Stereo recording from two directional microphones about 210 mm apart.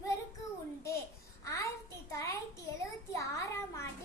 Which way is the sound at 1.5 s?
15° left (ahead or behind).